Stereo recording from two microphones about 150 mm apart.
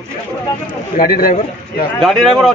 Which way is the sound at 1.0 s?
75° left (ahead or behind).